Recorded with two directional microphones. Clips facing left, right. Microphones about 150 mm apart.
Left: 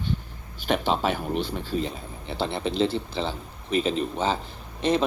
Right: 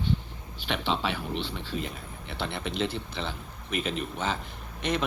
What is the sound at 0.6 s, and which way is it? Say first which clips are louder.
Speech: left 5 dB; 45° left (ahead or behind).